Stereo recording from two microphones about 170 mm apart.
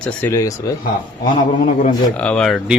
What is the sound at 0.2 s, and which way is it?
Speech, 15° left (ahead or behind).